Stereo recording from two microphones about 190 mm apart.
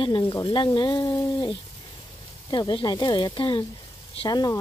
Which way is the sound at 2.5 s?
20° left (ahead or behind).